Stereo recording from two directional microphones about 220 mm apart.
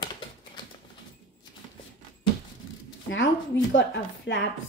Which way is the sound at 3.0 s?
55° left (ahead or behind).